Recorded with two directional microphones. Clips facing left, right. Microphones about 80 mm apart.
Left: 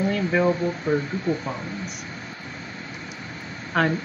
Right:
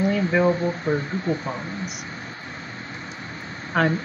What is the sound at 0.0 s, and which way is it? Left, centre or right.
Speech, centre.